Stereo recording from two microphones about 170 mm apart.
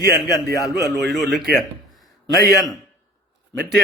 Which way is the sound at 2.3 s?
20° left (ahead or behind).